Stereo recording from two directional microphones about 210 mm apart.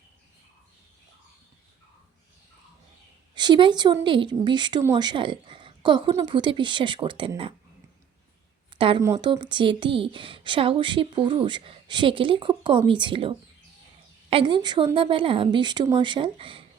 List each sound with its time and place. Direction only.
3.3 s speech: 20° right (ahead or behind)
8.7 s a sound: 25° right (ahead or behind)
9.1 s speech: 20° right (ahead or behind)